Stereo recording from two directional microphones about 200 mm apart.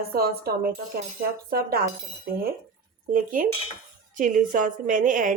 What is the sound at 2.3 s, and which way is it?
A woman's voice, 45° right (ahead or behind).